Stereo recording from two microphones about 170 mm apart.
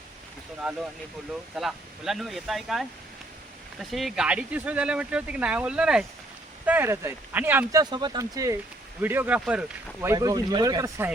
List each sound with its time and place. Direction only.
0.6 s speech: 5° right (ahead or behind)